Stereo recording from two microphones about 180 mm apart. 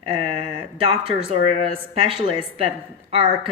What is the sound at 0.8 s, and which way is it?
Speech, 30° right (ahead or behind).